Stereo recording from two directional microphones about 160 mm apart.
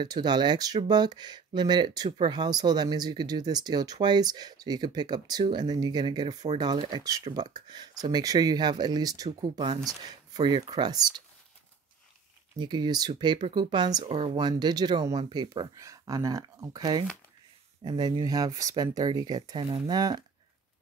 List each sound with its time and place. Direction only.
0.0 s speech: 25° right (ahead or behind)
12.5 s speech: 25° right (ahead or behind)